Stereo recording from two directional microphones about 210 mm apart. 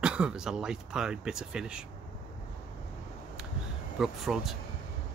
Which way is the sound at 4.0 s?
Centre (ahead or behind).